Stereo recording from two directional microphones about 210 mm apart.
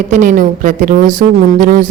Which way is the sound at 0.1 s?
40° right (ahead or behind).